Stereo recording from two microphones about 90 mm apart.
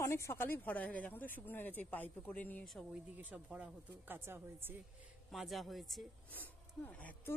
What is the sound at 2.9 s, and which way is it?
Speech, 15° right (ahead or behind).